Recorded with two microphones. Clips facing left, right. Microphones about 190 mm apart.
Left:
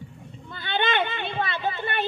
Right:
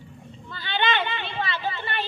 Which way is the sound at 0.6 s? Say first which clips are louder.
Left 1 dB; 50° left (ahead or behind).